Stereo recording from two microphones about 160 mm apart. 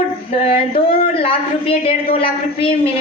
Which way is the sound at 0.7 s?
35° left (ahead or behind).